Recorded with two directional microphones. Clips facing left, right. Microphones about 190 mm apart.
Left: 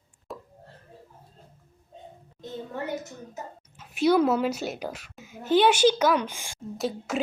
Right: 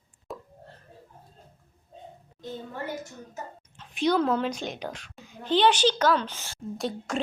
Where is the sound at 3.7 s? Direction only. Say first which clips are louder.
Left 3 dB; 5° left (ahead or behind).